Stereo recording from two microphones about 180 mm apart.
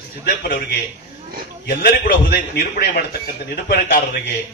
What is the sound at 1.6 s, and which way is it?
A man's voice, 55° left (ahead or behind).